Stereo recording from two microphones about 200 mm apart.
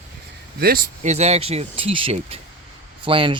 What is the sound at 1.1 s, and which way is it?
Speech, 35° right (ahead or behind).